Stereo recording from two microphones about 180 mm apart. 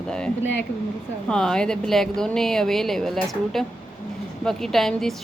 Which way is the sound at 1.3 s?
5° left (ahead or behind).